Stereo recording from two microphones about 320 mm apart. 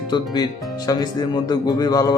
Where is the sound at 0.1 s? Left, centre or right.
Centre.